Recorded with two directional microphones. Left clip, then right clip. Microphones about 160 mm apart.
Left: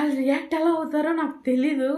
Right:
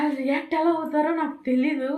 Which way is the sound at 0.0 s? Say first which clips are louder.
Left 1 dB; 15° left (ahead or behind).